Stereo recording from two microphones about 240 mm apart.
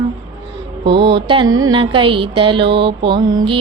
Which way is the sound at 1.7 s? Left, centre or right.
Right.